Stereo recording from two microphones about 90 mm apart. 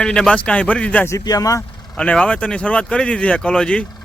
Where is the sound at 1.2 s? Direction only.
45° left (ahead or behind).